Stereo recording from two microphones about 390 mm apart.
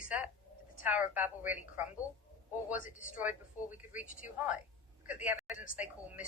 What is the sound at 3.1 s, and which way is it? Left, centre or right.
A man's voice, centre.